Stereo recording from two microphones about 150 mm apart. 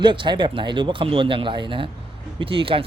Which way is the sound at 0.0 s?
30° right (ahead or behind).